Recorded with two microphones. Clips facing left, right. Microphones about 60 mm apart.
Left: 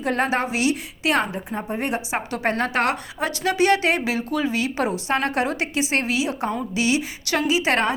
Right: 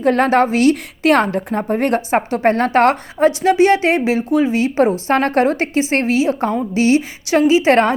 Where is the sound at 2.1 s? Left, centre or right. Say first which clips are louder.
Right 8 dB; right.